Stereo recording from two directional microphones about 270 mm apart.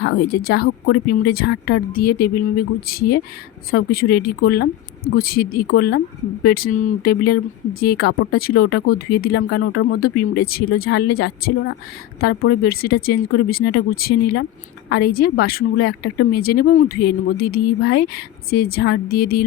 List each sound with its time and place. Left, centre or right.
0.0 s speech: left